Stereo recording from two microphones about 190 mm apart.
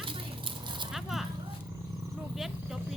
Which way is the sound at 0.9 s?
Centre (ahead or behind).